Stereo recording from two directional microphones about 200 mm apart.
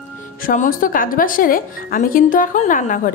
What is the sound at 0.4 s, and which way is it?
A woman's voice, 45° left (ahead or behind).